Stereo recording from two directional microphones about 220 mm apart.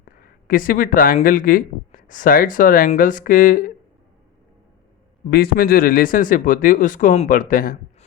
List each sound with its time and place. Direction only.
0.2 s speech: 40° left (ahead or behind)
5.3 s speech: 45° left (ahead or behind)